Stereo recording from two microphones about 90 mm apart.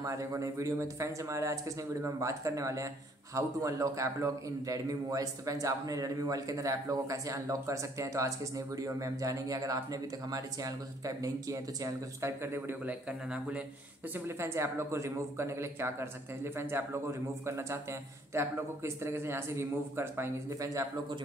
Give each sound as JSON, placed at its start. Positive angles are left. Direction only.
{"t": 0.0, "sound": "a man's voice", "side_deg": -35}
{"t": 14.1, "sound": "a man's voice", "side_deg": -30}